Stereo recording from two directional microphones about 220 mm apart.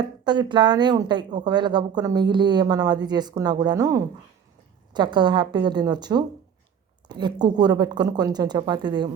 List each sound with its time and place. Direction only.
0.3 s speech: 20° right (ahead or behind)